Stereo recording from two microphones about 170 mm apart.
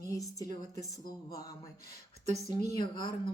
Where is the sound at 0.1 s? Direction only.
20° left (ahead or behind).